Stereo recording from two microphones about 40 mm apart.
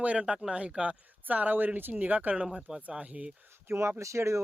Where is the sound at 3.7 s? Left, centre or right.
Right.